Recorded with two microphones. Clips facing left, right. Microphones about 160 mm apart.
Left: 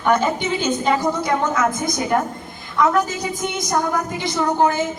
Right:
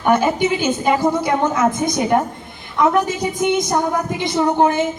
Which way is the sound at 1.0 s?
30° right (ahead or behind).